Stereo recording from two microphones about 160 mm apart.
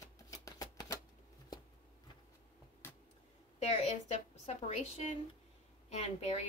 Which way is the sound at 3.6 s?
40° left (ahead or behind).